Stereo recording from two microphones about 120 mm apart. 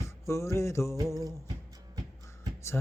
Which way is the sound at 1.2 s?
30° right (ahead or behind).